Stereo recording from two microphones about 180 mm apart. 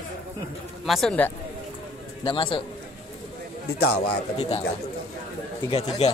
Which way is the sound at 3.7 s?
60° left (ahead or behind).